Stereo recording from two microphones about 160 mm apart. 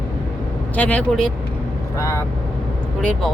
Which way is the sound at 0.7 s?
10° left (ahead or behind).